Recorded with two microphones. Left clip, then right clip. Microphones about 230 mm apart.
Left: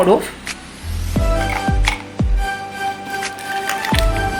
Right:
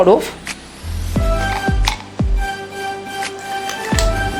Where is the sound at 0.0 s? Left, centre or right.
Right.